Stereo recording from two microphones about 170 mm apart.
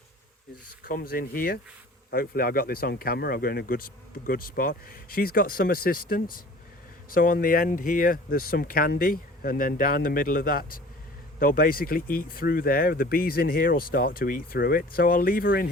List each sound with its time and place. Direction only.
0.9 s speech: 60° left (ahead or behind)